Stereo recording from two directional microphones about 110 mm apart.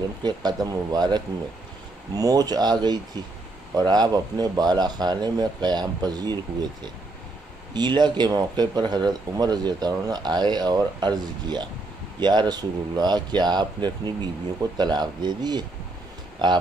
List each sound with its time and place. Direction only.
0.2 s speech: 40° right (ahead or behind)
7.7 s speech: 40° right (ahead or behind)